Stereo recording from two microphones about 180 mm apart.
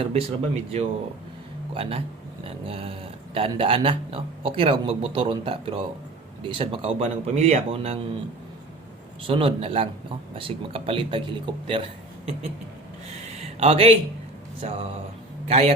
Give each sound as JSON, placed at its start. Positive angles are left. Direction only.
{"t": 0.0, "sound": "a man's voice", "side_deg": -35}
{"t": 9.2, "sound": "speech", "side_deg": -30}
{"t": 13.4, "sound": "a sound", "side_deg": -35}
{"t": 14.6, "sound": "a man's voice", "side_deg": -40}